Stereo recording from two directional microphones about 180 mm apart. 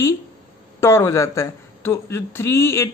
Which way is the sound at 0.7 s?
15° left (ahead or behind).